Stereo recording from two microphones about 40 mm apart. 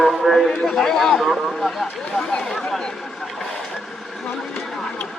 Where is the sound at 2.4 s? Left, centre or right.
Centre.